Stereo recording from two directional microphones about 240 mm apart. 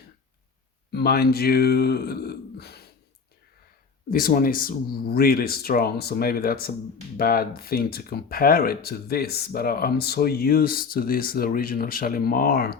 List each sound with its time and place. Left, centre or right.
0.9 s speech: left
4.1 s speech: left